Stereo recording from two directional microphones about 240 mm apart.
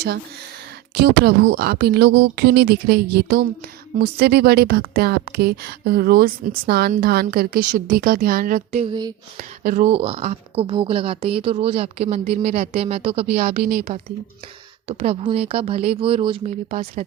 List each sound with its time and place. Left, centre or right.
0.9 s a woman's voice: right; by 9.1 s centre
9.4 s speech: right
13.3 s a woman's voice: right
15.0 s speech: right